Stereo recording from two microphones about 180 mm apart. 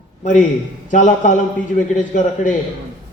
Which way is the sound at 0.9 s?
45° left (ahead or behind).